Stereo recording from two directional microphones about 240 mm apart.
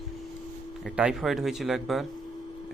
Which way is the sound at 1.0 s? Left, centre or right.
Centre.